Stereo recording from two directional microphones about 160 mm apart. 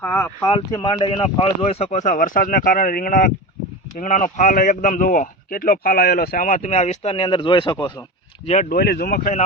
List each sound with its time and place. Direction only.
0.0 s speech: 10° left (ahead or behind)
0.4 s a man's voice: 25° left (ahead or behind)
8.7 s speech: 75° left (ahead or behind)